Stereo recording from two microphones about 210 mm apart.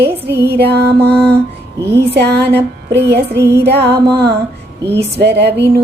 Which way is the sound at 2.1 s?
50° right (ahead or behind).